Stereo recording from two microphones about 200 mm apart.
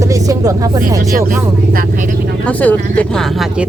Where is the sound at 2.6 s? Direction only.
10° left (ahead or behind).